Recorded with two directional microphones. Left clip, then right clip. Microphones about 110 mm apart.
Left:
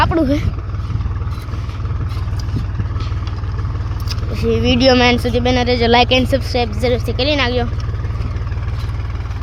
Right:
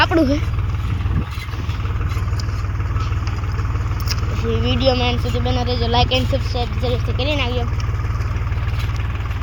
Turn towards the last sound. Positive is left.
turn(degrees=70)  # may be behind; listen again after turning